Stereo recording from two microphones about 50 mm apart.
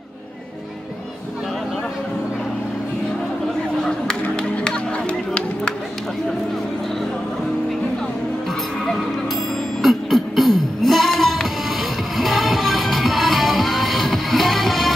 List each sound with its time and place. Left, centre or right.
4.1 s music: centre
9.8 s music: centre